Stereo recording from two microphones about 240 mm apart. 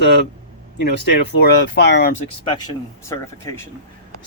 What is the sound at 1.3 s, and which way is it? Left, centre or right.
Speech, left.